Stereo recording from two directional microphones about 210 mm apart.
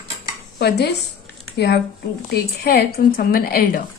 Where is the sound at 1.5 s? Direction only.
50° left (ahead or behind).